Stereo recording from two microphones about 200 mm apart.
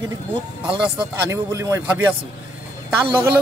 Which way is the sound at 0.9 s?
15° right (ahead or behind).